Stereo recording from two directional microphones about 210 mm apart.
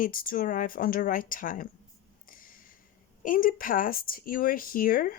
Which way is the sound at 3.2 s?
40° left (ahead or behind).